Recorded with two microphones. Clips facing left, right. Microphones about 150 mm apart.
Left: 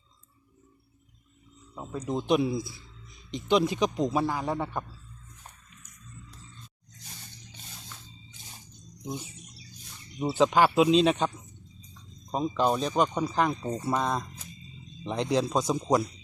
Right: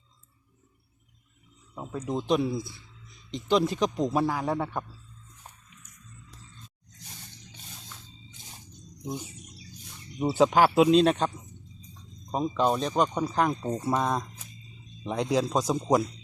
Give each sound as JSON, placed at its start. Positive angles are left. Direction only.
{"t": 1.7, "sound": "speech", "side_deg": -5}
{"t": 2.3, "sound": "speech", "side_deg": 10}
{"t": 10.2, "sound": "speech", "side_deg": -10}
{"t": 12.3, "sound": "speech", "side_deg": 0}